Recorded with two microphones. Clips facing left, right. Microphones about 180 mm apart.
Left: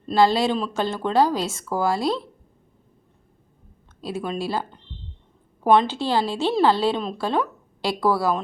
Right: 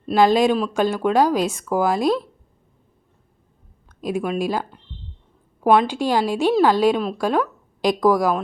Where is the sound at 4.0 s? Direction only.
15° right (ahead or behind).